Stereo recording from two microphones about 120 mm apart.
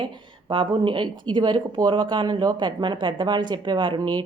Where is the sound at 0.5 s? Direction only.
45° right (ahead or behind).